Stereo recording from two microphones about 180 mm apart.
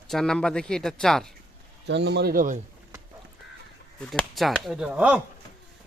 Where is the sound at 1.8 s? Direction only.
70° right (ahead or behind); by 2.6 s 50° right (ahead or behind).